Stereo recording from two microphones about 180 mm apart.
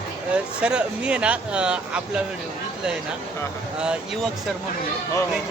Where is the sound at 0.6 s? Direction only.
5° right (ahead or behind).